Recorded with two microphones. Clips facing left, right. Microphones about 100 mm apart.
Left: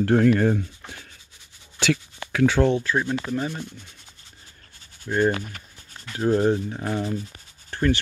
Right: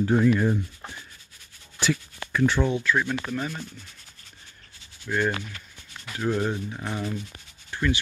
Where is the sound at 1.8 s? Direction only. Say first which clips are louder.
Left 3 dB; 90° left.